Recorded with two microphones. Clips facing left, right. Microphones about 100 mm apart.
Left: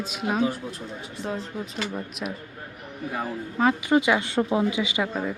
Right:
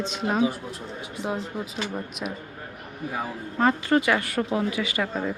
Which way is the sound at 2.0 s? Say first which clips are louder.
Even; centre (ahead or behind).